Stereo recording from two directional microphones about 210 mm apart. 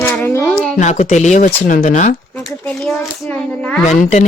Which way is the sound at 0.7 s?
35° left (ahead or behind).